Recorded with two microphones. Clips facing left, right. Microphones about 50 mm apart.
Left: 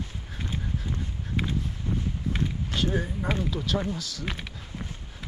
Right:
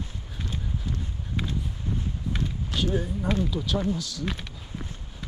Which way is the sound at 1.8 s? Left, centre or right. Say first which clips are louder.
Left 1 dB; left.